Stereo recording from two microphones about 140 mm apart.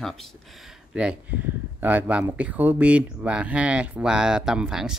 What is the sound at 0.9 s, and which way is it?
Speech, 10° right (ahead or behind).